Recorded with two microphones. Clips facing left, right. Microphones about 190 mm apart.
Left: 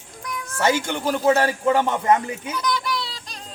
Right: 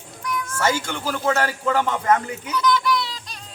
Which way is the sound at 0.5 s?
20° left (ahead or behind).